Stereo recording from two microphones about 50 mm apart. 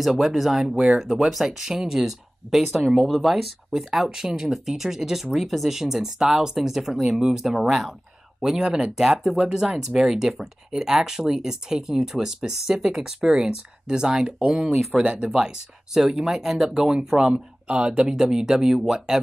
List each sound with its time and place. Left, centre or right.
0.0 s speech: centre
0.9 s speech: centre
1.3 s speech: centre
14.7 s speech: centre
15.0 s speech: centre